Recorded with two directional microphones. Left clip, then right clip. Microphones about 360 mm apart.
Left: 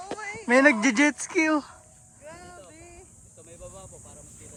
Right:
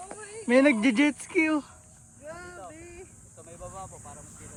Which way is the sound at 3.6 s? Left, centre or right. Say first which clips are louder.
Right 4 dB; centre.